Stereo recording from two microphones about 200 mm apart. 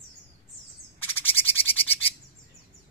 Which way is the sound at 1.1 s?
10° left (ahead or behind).